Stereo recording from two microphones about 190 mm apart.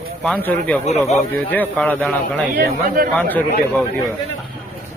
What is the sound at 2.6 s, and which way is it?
Speech, 50° right (ahead or behind).